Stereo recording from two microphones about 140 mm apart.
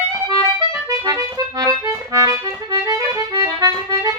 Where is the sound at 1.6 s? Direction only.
25° right (ahead or behind).